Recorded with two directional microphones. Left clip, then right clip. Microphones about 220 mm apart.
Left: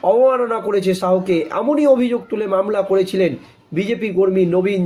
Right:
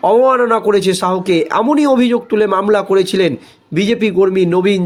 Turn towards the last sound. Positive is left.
turn(degrees=-45)  # may be behind; listen again after turning